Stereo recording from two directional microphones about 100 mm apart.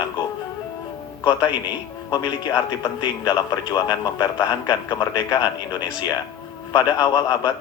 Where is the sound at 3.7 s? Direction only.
40° left (ahead or behind).